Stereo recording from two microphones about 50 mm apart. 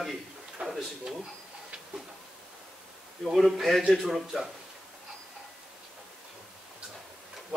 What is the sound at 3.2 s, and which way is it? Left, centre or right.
A man's voice, centre.